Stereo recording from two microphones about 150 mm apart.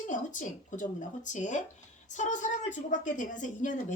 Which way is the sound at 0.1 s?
60° left (ahead or behind).